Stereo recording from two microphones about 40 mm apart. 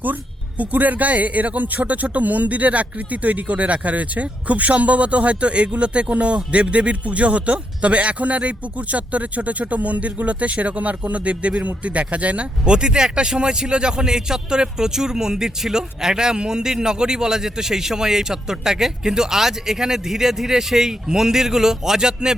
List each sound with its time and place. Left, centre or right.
0.6 s a man's voice: right; by 22.4 s centre